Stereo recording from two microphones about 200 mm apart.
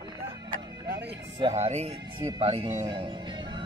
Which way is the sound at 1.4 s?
30° right (ahead or behind).